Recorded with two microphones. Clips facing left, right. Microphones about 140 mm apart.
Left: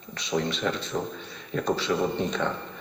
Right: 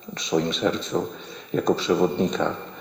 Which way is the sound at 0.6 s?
30° right (ahead or behind).